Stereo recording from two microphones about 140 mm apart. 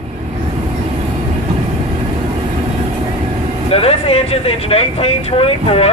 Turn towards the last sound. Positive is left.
turn(degrees=45)  # may be behind; listen again after turning